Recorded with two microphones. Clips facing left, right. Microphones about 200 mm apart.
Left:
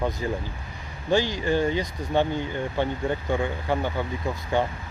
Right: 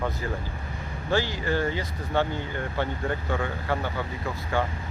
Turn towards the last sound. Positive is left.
turn(degrees=15)  # may be behind; listen again after turning